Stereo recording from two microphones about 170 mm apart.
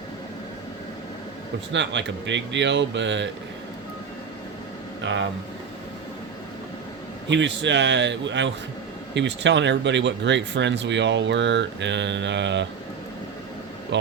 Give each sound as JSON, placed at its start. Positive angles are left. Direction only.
{"t": 1.7, "sound": "speech", "side_deg": -90}
{"t": 5.0, "sound": "speech", "side_deg": -90}
{"t": 7.3, "sound": "speech", "side_deg": -90}
{"t": 13.9, "sound": "a man's voice", "side_deg": -90}